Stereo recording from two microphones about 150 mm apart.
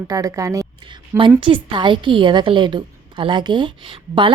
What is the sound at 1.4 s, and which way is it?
A woman's voice, 35° right (ahead or behind).